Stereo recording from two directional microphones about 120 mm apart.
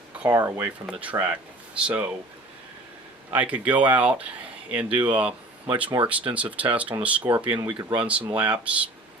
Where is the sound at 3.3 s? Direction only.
10° right (ahead or behind).